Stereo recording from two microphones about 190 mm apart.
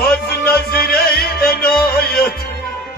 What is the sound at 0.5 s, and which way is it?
Music, 55° left (ahead or behind).